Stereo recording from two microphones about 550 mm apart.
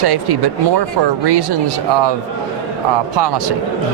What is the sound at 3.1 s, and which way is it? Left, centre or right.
Speech, right.